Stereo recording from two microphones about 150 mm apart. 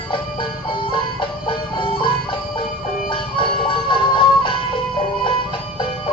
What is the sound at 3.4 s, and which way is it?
Music, 35° left (ahead or behind).